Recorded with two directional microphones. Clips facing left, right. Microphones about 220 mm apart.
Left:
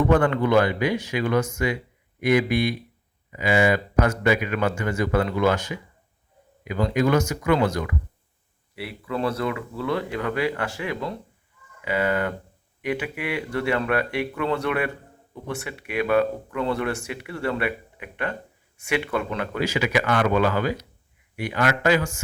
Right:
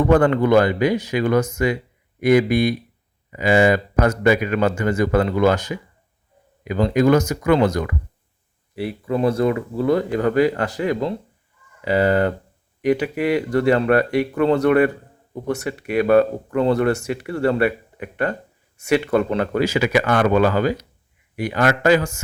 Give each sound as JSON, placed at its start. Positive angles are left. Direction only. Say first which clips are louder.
{"t": 0.1, "sound": "speech", "louder": "right 4 dB", "side_deg": -40}
{"t": 8.7, "sound": "speech", "louder": "right 7 dB", "side_deg": -30}